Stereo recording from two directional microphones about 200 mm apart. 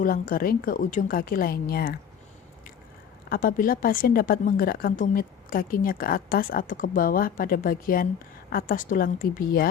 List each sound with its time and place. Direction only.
0.0 s a woman's voice: 45° left (ahead or behind)
3.2 s a woman's voice: 45° left (ahead or behind)